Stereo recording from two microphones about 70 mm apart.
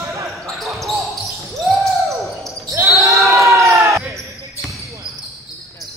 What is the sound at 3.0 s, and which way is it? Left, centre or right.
Basketball bounce, right.